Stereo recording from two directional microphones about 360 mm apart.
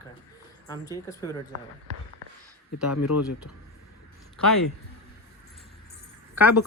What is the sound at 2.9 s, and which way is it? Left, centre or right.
Speech, left.